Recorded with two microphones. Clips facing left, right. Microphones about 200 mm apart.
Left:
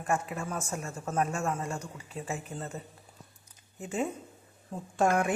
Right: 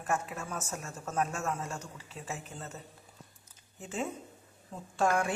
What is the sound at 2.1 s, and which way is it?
Speech, 45° left (ahead or behind).